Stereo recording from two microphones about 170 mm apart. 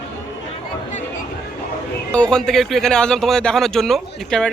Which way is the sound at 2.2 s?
5° left (ahead or behind).